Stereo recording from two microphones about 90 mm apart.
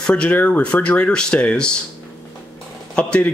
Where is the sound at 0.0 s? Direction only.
10° left (ahead or behind).